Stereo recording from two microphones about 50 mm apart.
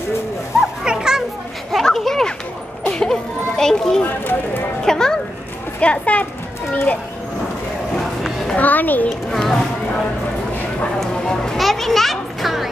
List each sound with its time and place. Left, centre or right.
0.6 s children playing: centre
1.7 s a sound: centre
2.9 s children playing: centre
4.0 s speech: left
4.8 s a child's voice: centre
5.8 s a child's voice: left
8.5 s a child's voice: left
9.3 s speech: centre
11.5 s a child's voice: centre